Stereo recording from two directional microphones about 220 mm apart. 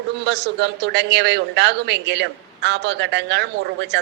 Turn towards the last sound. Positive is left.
turn(degrees=-50)  # may be behind; listen again after turning